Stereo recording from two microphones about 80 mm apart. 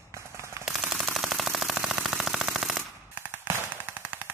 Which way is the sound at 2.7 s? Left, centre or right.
Right.